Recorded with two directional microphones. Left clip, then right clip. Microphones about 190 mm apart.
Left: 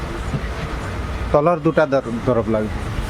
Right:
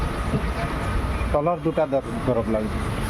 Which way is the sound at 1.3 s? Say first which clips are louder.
Left 7 dB; 35° left (ahead or behind).